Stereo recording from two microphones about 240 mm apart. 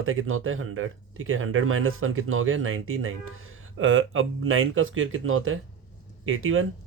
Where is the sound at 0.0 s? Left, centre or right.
Right.